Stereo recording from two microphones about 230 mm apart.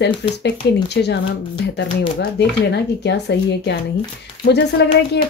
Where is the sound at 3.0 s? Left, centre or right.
Left.